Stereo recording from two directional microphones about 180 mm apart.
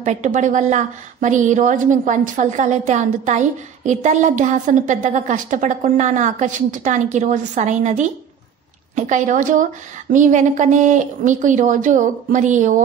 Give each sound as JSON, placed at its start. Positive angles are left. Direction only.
{"t": 0.0, "sound": "a woman's voice", "side_deg": -45}